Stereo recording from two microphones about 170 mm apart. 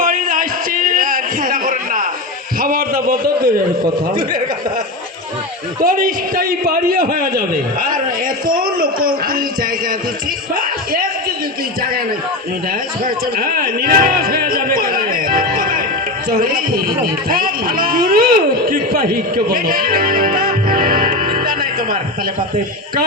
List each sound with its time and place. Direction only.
0.0 s a sound: 55° right (ahead or behind)
4.1 s a man's voice: 55° right (ahead or behind)
5.8 s a man's voice: 55° right (ahead or behind)
10.5 s music: 55° right (ahead or behind)
13.1 s a man's voice: 60° right (ahead or behind)